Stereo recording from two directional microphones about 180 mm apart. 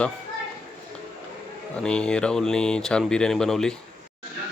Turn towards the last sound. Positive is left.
turn(degrees=5)  # may be behind; listen again after turning